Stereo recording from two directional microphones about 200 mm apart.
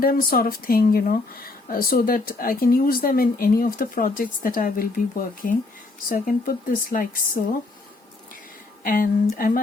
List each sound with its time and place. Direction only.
0.0 s speech: 45° left (ahead or behind)
8.8 s speech: 45° left (ahead or behind)